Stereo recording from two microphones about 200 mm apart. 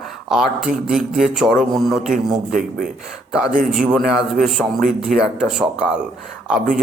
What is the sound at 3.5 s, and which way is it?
Speech, 40° right (ahead or behind).